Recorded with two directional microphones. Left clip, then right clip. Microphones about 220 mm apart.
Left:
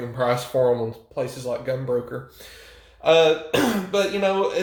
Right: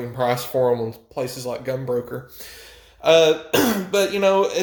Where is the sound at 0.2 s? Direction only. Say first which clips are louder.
Even; 30° right (ahead or behind).